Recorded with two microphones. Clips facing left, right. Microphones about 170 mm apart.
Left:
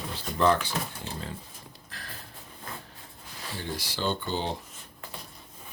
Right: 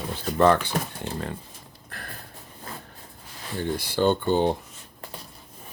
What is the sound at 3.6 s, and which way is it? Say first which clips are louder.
Speech: right 9 dB; 55° right (ahead or behind).